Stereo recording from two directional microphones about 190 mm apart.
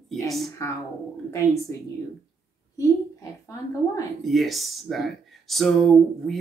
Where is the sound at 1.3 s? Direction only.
15° left (ahead or behind).